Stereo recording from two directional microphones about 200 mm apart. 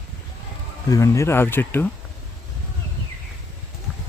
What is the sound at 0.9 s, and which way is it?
Speech, 15° left (ahead or behind).